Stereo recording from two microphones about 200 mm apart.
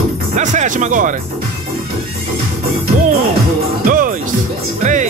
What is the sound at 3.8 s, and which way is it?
Music, 45° right (ahead or behind).